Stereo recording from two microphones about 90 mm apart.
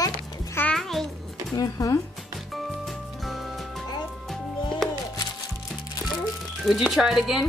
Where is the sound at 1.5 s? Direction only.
40° left (ahead or behind).